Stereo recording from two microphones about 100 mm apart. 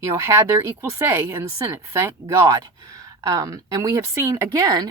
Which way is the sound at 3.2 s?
35° right (ahead or behind).